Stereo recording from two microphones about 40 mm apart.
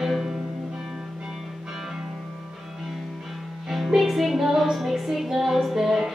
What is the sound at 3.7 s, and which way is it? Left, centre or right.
Music, centre.